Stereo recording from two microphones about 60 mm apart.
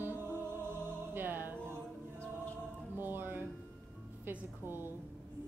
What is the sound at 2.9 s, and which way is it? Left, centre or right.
Music, right.